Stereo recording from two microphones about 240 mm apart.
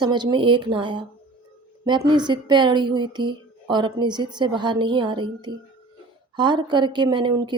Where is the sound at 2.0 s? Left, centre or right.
Centre.